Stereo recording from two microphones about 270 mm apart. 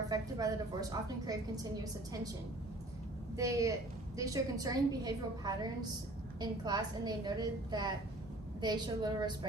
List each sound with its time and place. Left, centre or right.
0.1 s a woman's voice: centre
3.3 s a woman's voice: centre